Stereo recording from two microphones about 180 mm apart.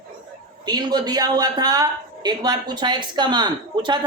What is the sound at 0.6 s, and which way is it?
Speech, 25° right (ahead or behind).